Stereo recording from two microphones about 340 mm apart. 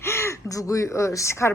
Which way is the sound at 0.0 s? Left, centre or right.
Centre.